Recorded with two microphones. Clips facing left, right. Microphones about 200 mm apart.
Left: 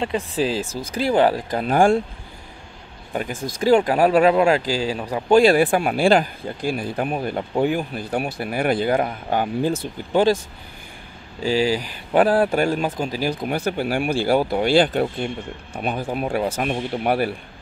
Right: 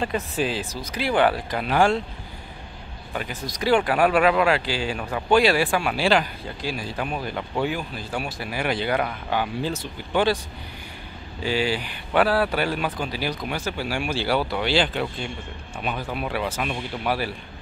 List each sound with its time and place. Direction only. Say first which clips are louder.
0.0 s speech: left 3 dB; 30° left (ahead or behind); by 2.0 s 45° left (ahead or behind)
3.2 s speech: left 5 dB; 50° left (ahead or behind)
11.4 s speech: left 4 dB; 40° left (ahead or behind)
13.5 s speech: left 5 dB; 55° left (ahead or behind)